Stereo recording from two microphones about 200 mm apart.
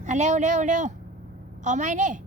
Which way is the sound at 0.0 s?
35° right (ahead or behind).